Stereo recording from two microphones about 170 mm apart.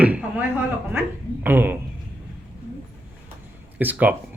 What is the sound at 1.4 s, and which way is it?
Speech, 10° right (ahead or behind).